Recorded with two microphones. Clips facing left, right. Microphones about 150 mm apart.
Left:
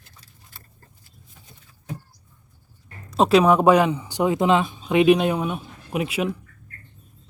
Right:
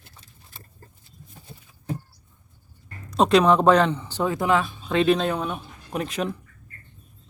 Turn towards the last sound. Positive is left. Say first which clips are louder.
# left 3 dB
turn(degrees=10)  # may be behind; listen again after turning